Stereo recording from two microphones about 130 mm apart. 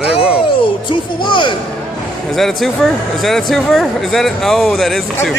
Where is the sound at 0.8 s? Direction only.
40° left (ahead or behind).